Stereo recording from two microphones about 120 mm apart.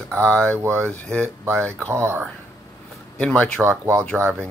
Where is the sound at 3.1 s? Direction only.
10° left (ahead or behind).